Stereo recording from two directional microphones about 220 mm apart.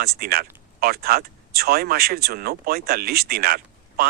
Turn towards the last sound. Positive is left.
turn(degrees=-45)  # may be behind; listen again after turning